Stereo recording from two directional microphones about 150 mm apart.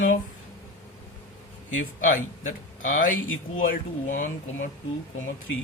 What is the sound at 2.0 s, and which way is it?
A man's voice, 65° left (ahead or behind).